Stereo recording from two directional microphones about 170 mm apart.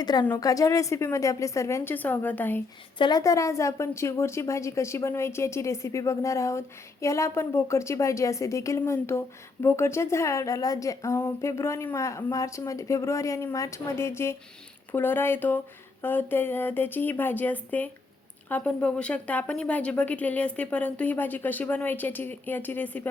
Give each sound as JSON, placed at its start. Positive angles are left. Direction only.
{"t": 0.0, "sound": "a woman's voice", "side_deg": 25}
{"t": 3.0, "sound": "a woman's voice", "side_deg": 20}